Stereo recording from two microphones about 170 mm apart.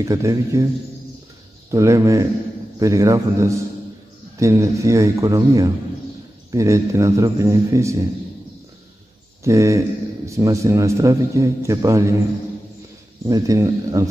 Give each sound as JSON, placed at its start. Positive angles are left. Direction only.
{"t": 0.0, "sound": "a man's voice", "side_deg": -20}
{"t": 1.7, "sound": "a man's voice", "side_deg": -20}
{"t": 9.4, "sound": "a man's voice", "side_deg": -20}
{"t": 13.3, "sound": "a man's voice", "side_deg": -20}